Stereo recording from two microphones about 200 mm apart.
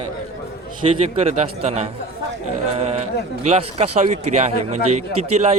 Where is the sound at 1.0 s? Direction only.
30° right (ahead or behind).